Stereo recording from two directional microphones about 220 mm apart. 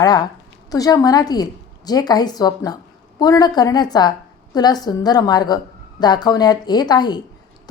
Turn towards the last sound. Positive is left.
turn(degrees=20)  # may be behind; listen again after turning